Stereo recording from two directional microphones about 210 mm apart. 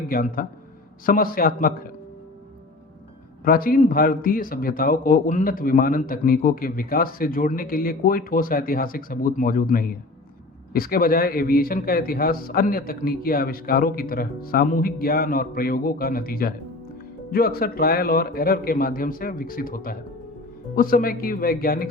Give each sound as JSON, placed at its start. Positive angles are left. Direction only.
{"t": 0.1, "sound": "a man's voice", "side_deg": 45}
{"t": 3.4, "sound": "a man's voice", "side_deg": 45}